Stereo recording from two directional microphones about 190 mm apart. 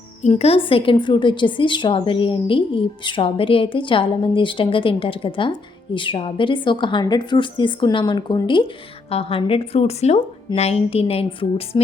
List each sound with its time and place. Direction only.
0.2 s a woman's voice: 35° left (ahead or behind)